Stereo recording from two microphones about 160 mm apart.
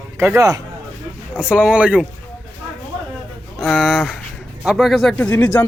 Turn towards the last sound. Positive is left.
turn(degrees=10)  # may be behind; listen again after turning